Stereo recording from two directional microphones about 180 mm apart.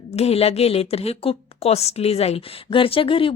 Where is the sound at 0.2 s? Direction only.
35° left (ahead or behind).